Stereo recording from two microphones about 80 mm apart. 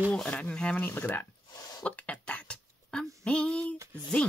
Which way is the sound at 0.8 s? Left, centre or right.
Left.